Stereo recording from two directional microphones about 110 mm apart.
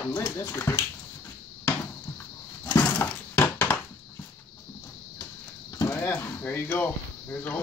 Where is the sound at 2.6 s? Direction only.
25° left (ahead or behind).